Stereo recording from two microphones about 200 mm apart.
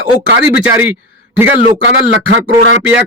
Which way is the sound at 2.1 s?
70° right (ahead or behind).